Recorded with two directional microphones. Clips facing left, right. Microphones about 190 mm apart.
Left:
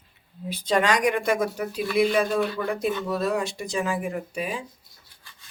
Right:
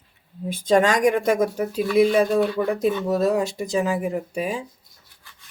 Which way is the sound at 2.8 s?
40° right (ahead or behind).